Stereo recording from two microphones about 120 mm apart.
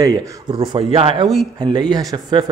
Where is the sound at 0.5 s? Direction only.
45° right (ahead or behind).